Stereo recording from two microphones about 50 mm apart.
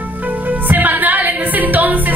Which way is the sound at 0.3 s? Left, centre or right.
Right.